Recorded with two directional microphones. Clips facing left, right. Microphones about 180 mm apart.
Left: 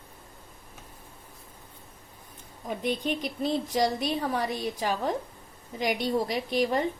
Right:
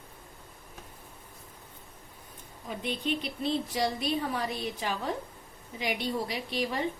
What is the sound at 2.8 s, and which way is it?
A woman's voice, 45° left (ahead or behind).